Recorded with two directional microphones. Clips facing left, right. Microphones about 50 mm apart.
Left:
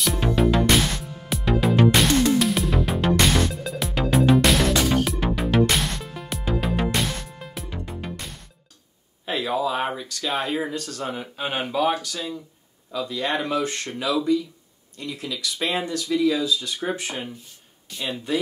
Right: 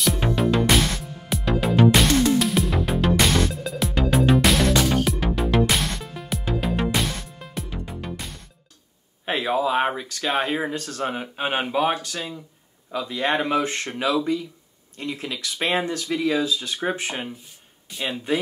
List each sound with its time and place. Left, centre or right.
0.4 s music: centre
9.2 s speech: right